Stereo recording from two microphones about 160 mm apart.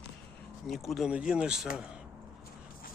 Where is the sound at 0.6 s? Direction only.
Centre (ahead or behind).